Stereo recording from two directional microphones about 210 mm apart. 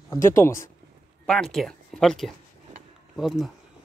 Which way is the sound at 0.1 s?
15° left (ahead or behind).